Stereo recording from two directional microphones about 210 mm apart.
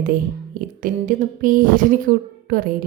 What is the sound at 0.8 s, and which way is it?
A woman's voice, 40° right (ahead or behind).